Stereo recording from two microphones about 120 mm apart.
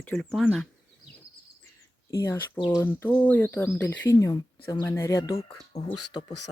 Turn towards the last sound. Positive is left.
turn(degrees=35)  # may be behind; listen again after turning